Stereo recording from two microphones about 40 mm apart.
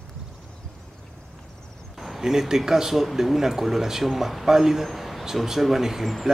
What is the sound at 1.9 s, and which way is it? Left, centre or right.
Speech, centre.